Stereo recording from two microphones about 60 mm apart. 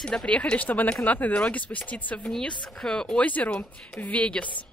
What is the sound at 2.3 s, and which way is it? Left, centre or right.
A woman's voice, centre.